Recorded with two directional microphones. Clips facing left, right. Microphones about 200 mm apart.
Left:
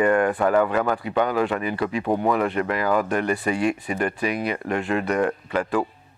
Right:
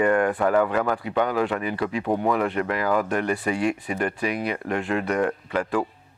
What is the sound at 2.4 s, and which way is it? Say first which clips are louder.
Speech: left 1 dB; 15° left (ahead or behind).